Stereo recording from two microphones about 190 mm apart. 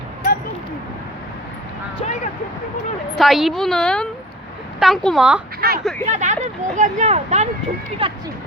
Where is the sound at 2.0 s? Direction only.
40° left (ahead or behind).